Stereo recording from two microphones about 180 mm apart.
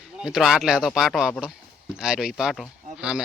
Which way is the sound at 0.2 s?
5° right (ahead or behind).